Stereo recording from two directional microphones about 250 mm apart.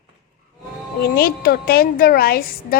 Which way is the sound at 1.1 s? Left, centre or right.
Left.